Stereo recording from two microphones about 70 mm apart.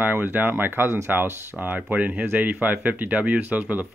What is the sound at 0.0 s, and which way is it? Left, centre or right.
Speech, right.